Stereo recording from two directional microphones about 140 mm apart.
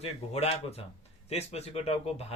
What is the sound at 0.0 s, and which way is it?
Speech, 50° left (ahead or behind).